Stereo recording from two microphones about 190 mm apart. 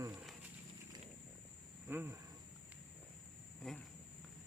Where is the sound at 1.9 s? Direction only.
10° right (ahead or behind).